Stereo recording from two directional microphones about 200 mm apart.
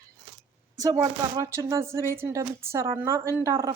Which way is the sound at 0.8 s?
15° right (ahead or behind).